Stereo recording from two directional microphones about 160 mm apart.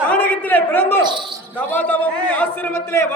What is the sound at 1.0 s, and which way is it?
Speech, 30° right (ahead or behind).